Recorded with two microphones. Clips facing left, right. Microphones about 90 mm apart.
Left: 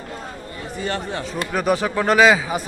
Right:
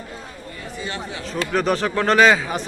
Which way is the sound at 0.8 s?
50° left (ahead or behind).